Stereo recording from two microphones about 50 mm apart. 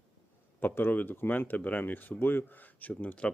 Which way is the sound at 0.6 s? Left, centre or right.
Left.